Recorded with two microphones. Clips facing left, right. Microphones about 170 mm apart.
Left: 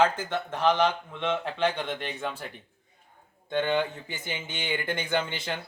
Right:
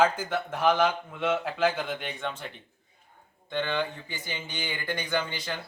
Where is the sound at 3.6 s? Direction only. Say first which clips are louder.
Left 3 dB; 20° left (ahead or behind).